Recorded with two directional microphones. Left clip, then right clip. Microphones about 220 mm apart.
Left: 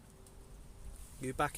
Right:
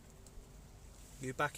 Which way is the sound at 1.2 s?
20° left (ahead or behind).